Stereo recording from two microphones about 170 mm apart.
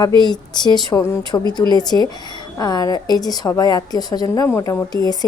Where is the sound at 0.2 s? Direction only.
25° left (ahead or behind).